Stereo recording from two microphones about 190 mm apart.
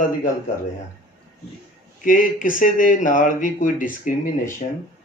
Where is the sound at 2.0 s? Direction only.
45° left (ahead or behind).